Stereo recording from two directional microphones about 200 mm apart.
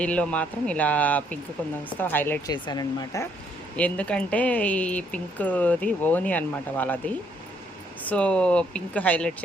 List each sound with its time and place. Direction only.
0.0 s speech: 5° left (ahead or behind)
3.8 s speech: 5° left (ahead or behind)
8.1 s speech: 5° left (ahead or behind)